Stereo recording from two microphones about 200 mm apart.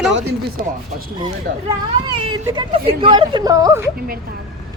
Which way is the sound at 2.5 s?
25° right (ahead or behind).